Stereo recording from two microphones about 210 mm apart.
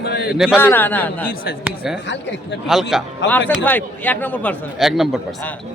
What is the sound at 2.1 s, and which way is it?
Speech, 55° left (ahead or behind).